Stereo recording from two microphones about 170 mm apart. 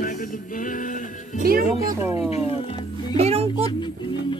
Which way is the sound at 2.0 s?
15° right (ahead or behind).